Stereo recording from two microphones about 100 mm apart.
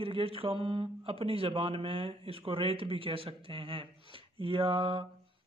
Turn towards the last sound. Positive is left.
turn(degrees=-60)  # may be behind; listen again after turning